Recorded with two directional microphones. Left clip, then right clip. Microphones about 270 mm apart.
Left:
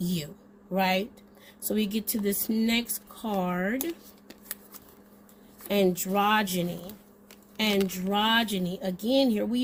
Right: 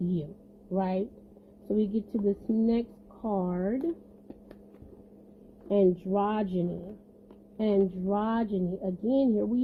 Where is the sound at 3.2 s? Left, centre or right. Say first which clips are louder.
Left 2 dB; left.